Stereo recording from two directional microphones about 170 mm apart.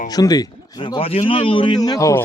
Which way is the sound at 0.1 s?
20° left (ahead or behind).